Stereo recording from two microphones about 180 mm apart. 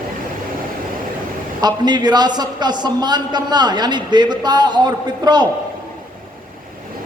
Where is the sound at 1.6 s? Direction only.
25° right (ahead or behind).